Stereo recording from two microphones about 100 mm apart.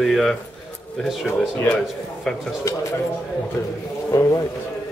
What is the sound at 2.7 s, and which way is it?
Speech, 35° left (ahead or behind).